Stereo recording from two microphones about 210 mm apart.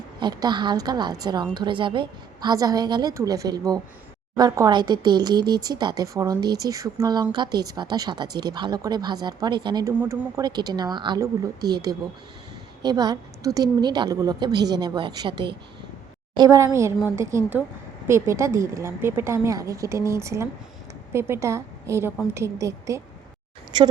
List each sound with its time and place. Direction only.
0.2 s a woman's voice: 20° right (ahead or behind)